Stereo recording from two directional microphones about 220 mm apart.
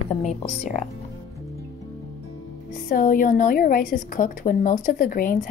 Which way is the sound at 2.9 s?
40° left (ahead or behind).